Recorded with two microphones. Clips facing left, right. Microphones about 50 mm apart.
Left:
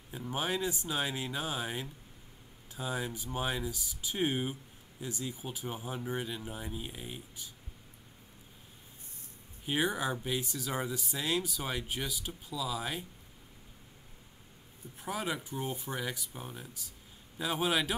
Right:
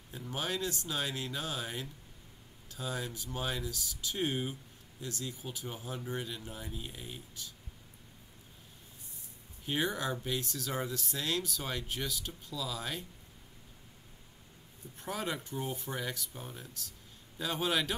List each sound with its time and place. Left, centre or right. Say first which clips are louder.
0.1 s speech: left 3 dB; centre
9.7 s speech: left 2 dB; centre
15.0 s speech: left 1 dB; centre